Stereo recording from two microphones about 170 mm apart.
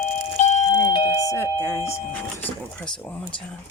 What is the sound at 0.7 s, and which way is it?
Doorbell, 25° left (ahead or behind).